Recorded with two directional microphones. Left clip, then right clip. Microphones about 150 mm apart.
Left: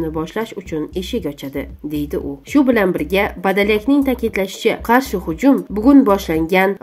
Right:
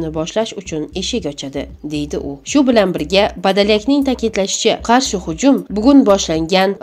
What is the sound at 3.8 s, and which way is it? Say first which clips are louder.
Speech: right 1 dB; 35° right (ahead or behind).